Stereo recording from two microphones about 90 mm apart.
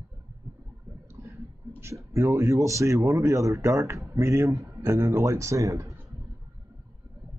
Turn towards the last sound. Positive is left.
turn(degrees=-35)  # may be behind; listen again after turning